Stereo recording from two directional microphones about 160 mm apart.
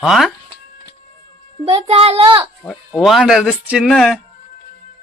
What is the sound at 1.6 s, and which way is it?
Speech, 40° right (ahead or behind).